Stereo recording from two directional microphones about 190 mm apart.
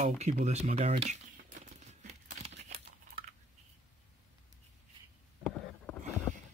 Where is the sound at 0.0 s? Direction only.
35° right (ahead or behind).